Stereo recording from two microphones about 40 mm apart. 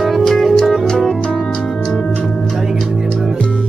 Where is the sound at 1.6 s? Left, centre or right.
Centre.